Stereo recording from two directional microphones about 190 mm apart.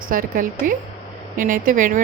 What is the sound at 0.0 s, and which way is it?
A woman's voice, 45° right (ahead or behind).